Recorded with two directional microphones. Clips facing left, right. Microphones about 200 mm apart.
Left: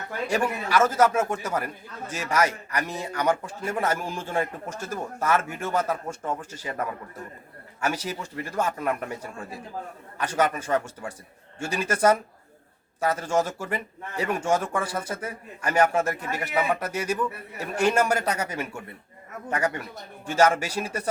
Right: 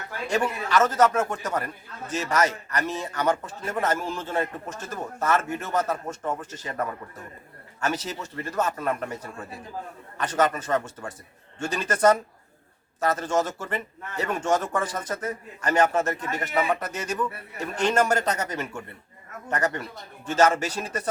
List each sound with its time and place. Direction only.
0.3 s a man's voice: 10° left (ahead or behind)